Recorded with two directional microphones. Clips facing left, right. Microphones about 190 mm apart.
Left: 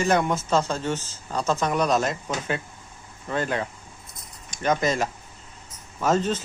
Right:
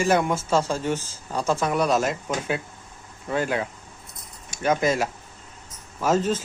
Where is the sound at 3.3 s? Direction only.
5° right (ahead or behind).